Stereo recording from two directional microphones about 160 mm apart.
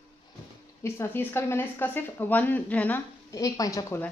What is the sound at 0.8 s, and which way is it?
Speech, 15° left (ahead or behind).